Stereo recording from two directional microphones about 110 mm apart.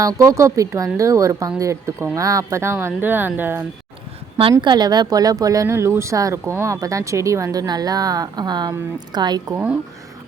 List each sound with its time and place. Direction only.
0.0 s a woman's voice: 30° right (ahead or behind)
4.6 s speech: 40° right (ahead or behind)